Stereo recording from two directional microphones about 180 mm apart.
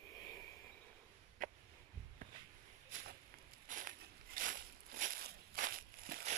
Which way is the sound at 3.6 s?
50° right (ahead or behind).